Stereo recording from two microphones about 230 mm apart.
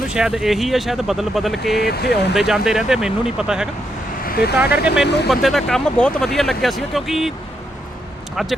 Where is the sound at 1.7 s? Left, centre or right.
Left.